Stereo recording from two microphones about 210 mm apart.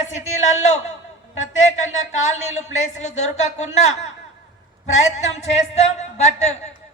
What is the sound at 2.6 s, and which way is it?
Speech, 35° left (ahead or behind).